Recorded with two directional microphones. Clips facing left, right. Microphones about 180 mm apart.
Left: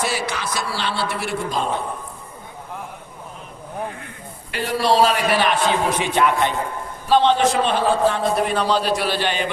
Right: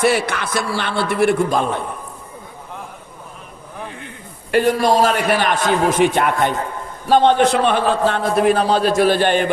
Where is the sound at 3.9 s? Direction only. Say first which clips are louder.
Right 1 dB; 20° right (ahead or behind).